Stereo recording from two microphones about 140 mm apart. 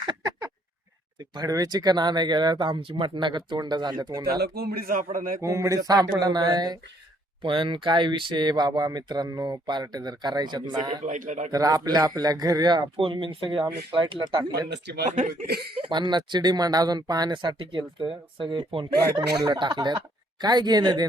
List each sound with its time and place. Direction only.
0.0 s a sound: 30° right (ahead or behind)
1.3 s speech: 25° right (ahead or behind)
4.3 s a man's voice: 90° right
5.1 s mantra: 85° right
5.4 s speech: 20° right (ahead or behind)
11.0 s a man's voice: 65° right (ahead or behind)
11.5 s speech: 25° right (ahead or behind)
15.7 s speech: 35° right (ahead or behind)